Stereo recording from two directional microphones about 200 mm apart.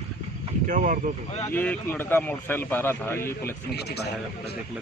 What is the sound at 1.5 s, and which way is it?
A man's voice, 10° left (ahead or behind).